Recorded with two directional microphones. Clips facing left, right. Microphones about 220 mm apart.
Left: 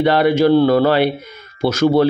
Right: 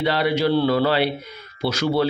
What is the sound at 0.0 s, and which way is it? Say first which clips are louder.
Speech: left 7 dB; 50° left (ahead or behind).